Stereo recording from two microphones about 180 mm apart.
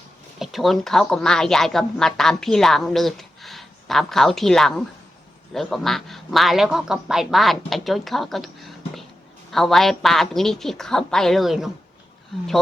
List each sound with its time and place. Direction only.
0.3 s speech: centre (ahead or behind)